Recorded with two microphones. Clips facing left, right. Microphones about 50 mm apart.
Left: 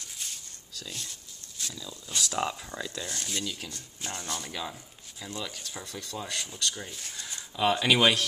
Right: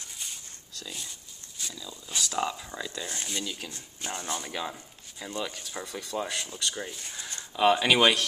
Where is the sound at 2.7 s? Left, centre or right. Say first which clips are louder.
Even; centre.